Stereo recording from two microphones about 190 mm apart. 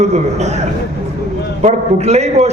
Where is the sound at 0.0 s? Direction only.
35° right (ahead or behind).